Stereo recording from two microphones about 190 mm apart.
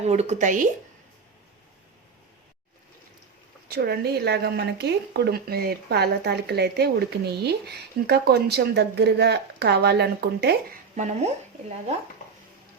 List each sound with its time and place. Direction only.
0.0 s speech: 35° right (ahead or behind)
3.7 s speech: 55° right (ahead or behind)
10.9 s speech: 40° right (ahead or behind)